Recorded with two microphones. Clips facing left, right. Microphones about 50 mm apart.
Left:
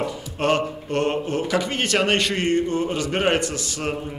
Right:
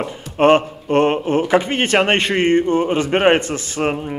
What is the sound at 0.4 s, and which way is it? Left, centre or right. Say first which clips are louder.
A man's voice: right 8 dB; right.